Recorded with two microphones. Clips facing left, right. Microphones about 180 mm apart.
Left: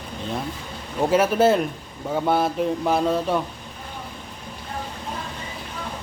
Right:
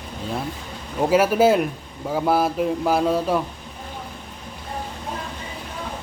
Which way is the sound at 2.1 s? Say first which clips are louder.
Right 1 dB; 5° right (ahead or behind).